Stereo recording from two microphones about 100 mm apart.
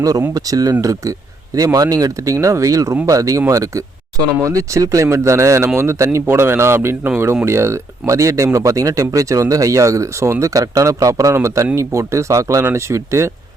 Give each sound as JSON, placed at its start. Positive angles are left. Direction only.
{"t": 0.3, "sound": "a man's voice", "side_deg": -35}